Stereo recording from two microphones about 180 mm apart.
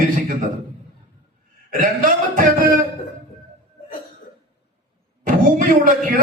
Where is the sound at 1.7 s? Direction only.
50° right (ahead or behind).